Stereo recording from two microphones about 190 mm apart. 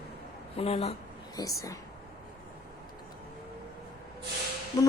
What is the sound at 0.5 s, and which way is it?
Speech, 35° left (ahead or behind).